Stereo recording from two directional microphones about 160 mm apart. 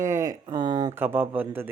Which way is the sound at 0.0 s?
20° right (ahead or behind).